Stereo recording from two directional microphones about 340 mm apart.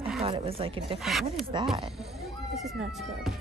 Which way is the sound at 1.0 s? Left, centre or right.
Centre.